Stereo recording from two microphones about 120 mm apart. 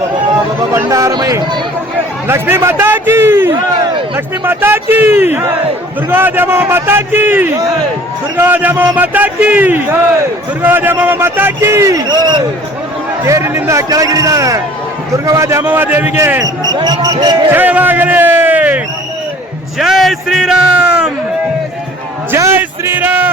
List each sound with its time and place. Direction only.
0.7 s a man's voice: 25° right (ahead or behind)
2.2 s a man's voice: 20° right (ahead or behind); by 12.4 s 35° right (ahead or behind)
13.2 s a man's voice: 25° right (ahead or behind)
16.7 s speech: 35° right (ahead or behind)
17.5 s a man's voice: 15° right (ahead or behind)
19.8 s speech: centre (ahead or behind)
22.3 s a sound: 20° right (ahead or behind)